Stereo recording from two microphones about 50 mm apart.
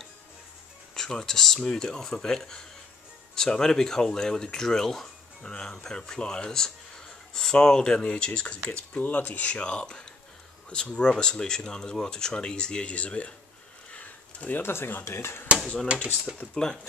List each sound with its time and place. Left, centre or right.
0.9 s speech: centre; by 13.3 s left
13.9 s a sound: left
14.6 s speech: left
16.4 s speech: left